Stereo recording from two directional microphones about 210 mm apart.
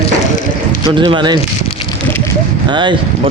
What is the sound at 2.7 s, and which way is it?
Speech, 20° right (ahead or behind).